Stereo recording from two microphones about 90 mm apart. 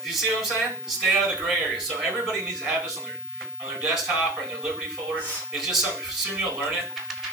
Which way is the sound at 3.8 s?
5° right (ahead or behind).